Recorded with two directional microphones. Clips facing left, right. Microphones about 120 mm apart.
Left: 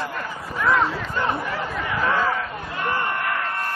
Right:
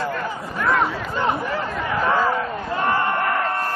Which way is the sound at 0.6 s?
5° right (ahead or behind).